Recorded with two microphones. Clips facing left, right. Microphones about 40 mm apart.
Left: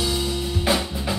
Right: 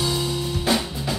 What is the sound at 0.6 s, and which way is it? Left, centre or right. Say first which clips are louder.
Drum kit: left 1 dB; centre.